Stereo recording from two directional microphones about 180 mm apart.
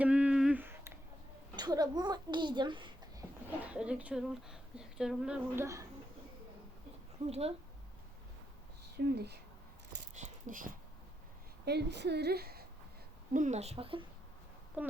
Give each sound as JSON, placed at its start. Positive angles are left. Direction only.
{"t": 0.0, "sound": "a sound", "side_deg": -5}
{"t": 1.5, "sound": "a sound", "side_deg": -20}
{"t": 3.6, "sound": "a woman's voice", "side_deg": -5}
{"t": 7.3, "sound": "a woman's voice", "side_deg": -35}
{"t": 9.1, "sound": "a woman's voice", "side_deg": -65}
{"t": 10.2, "sound": "dog", "side_deg": -45}
{"t": 11.6, "sound": "a woman's voice", "side_deg": -65}
{"t": 13.3, "sound": "a woman's voice", "side_deg": -40}
{"t": 14.8, "sound": "a woman's voice", "side_deg": -5}